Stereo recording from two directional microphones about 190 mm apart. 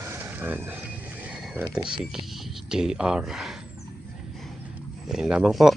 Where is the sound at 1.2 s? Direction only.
5° right (ahead or behind).